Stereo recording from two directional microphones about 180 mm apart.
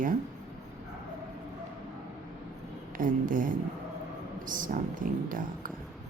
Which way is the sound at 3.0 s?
50° right (ahead or behind).